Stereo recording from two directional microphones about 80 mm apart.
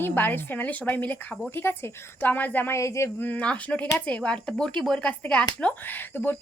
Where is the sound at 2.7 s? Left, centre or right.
Left.